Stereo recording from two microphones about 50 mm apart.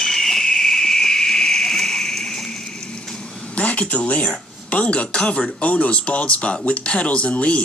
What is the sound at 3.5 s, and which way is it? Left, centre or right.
Speech, left.